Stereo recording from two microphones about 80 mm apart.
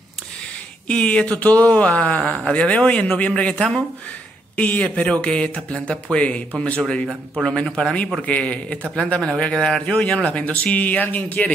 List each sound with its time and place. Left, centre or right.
0.8 s speech: centre